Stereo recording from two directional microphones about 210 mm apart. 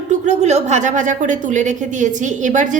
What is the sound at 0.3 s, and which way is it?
A woman's voice, 35° right (ahead or behind).